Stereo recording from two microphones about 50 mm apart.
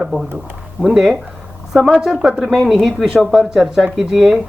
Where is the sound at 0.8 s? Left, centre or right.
Centre.